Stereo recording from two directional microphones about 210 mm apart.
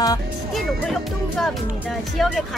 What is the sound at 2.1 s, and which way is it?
Speech, centre (ahead or behind).